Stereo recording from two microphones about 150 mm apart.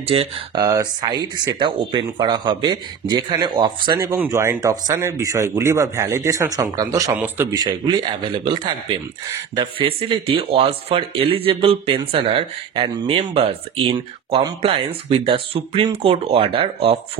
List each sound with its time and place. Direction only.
0.0 s speech: 40° right (ahead or behind)
0.6 s speech: 25° right (ahead or behind)
4.1 s speech: 15° right (ahead or behind); by 13.9 s 40° right (ahead or behind)
13.9 s speech: 30° right (ahead or behind)